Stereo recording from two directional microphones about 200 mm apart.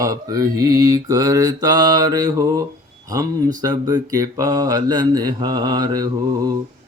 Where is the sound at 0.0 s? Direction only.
15° right (ahead or behind).